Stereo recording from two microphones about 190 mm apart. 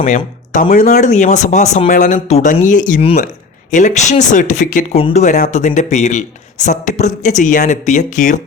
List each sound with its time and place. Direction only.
0.5 s speech: 45° left (ahead or behind)